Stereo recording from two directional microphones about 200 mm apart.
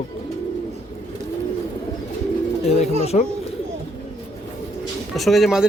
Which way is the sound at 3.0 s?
30° left (ahead or behind).